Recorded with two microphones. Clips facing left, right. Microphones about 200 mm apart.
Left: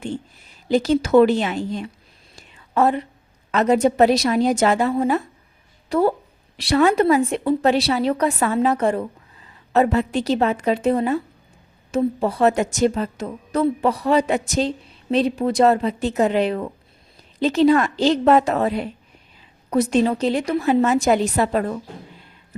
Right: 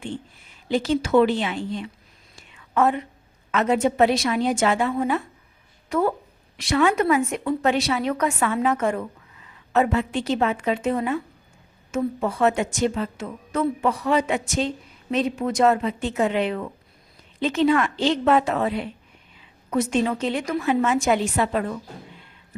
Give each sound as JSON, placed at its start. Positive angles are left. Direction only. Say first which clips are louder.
{"t": 0.0, "sound": "a woman's voice", "louder": "left 4 dB", "side_deg": 40}
{"t": 2.3, "sound": "whispering", "louder": "left 2 dB", "side_deg": 35}
{"t": 3.5, "sound": "a woman's voice", "louder": "left 4 dB", "side_deg": 40}